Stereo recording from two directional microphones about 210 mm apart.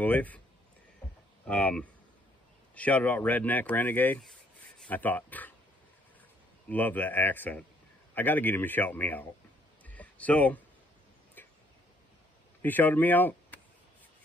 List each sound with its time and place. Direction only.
0.0 s a man's voice: 10° left (ahead or behind)
1.4 s speech: 5° left (ahead or behind)
6.7 s a man's voice: 10° left (ahead or behind)
9.8 s a sound: 5° left (ahead or behind)
12.6 s speech: 10° left (ahead or behind)